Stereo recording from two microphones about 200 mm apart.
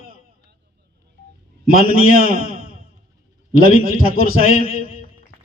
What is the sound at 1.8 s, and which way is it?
A man's voice, 45° right (ahead or behind).